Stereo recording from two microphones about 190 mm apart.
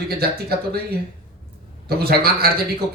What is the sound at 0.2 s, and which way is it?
Speech, 55° right (ahead or behind).